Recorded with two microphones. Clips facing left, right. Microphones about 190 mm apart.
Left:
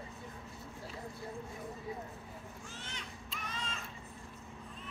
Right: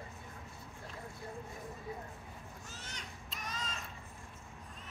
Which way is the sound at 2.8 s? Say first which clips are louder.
Left 2 dB; 40° right (ahead or behind).